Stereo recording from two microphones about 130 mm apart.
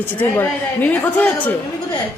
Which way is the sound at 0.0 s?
15° left (ahead or behind).